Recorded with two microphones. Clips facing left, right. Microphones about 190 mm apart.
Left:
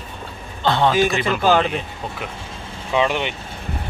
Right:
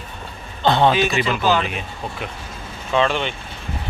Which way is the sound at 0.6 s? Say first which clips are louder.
Right 2 dB; 20° right (ahead or behind).